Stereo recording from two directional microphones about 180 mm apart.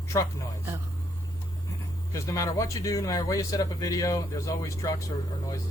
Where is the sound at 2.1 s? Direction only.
15° left (ahead or behind).